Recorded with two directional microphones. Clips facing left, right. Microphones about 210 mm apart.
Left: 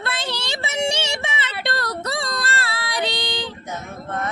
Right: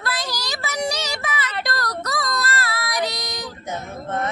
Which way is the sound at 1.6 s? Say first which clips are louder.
Left 1 dB; 25° left (ahead or behind).